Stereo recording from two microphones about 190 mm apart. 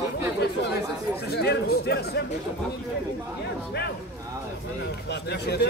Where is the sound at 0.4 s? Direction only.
60° left (ahead or behind).